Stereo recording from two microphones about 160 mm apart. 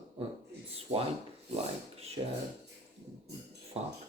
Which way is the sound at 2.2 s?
35° right (ahead or behind).